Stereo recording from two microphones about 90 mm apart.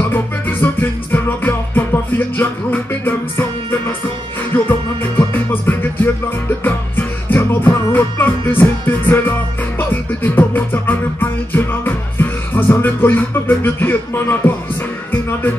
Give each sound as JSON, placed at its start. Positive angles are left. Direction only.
{"t": 0.1, "sound": "music", "side_deg": 20}